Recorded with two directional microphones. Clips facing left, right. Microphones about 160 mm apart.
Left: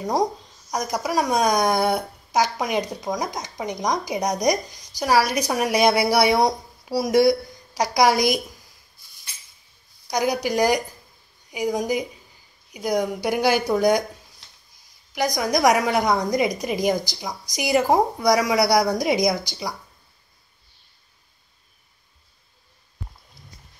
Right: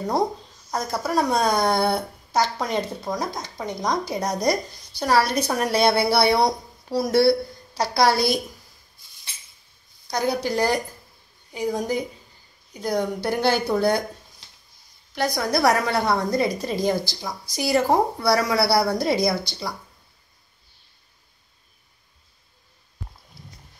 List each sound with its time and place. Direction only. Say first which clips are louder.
0.7 s a woman's voice: left 1 dB; 15° left (ahead or behind)
1.8 s speech: left 1 dB; centre (ahead or behind)
2.3 s a woman's voice: left 1 dB; 15° left (ahead or behind)
10.0 s a woman's voice: left 1 dB; 15° left (ahead or behind)
15.1 s a woman's voice: left 1 dB; 15° left (ahead or behind)